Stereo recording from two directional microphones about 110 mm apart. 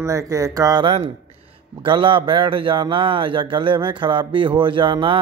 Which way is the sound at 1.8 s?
45° right (ahead or behind).